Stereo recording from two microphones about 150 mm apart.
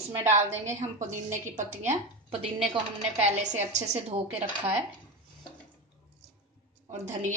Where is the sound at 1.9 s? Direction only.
40° right (ahead or behind).